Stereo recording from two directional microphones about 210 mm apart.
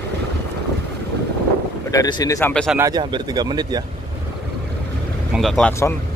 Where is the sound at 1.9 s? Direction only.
15° left (ahead or behind).